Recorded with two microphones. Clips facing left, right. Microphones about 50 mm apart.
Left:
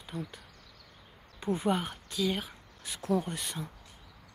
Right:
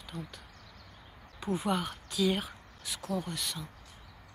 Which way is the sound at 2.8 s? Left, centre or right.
Centre.